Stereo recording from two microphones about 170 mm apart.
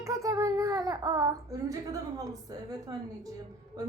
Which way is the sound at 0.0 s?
20° right (ahead or behind).